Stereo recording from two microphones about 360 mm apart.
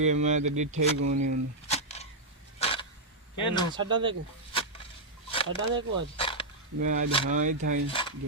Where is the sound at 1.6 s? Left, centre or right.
Centre.